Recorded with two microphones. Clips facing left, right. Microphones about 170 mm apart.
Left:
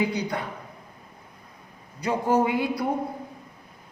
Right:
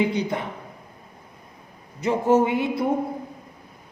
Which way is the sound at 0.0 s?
25° right (ahead or behind).